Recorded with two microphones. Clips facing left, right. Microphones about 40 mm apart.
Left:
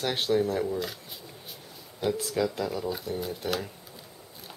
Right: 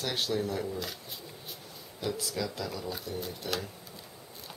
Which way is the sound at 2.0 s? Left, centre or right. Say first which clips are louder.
Left 6 dB; left.